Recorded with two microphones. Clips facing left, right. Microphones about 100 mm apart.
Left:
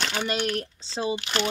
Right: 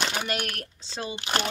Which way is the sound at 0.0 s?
15° right (ahead or behind).